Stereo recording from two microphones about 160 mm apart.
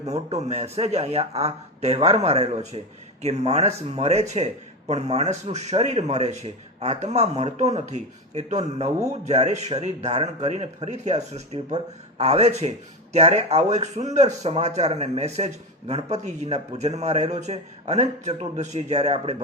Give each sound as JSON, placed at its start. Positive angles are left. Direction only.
{"t": 0.0, "sound": "a man's voice", "side_deg": -45}